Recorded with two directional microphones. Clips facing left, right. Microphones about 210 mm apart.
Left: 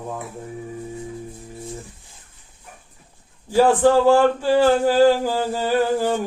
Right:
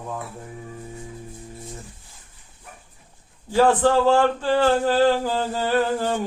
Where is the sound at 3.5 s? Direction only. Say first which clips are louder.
Left 2 dB; 10° left (ahead or behind).